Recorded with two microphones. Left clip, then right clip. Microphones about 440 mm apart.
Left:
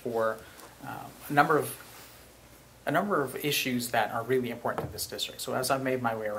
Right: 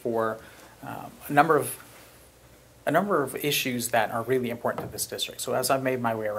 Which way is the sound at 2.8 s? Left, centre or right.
Right.